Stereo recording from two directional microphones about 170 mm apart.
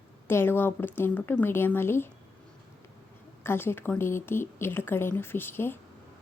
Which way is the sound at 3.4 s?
15° left (ahead or behind).